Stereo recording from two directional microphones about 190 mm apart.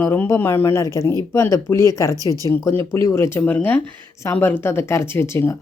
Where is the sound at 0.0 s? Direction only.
10° left (ahead or behind).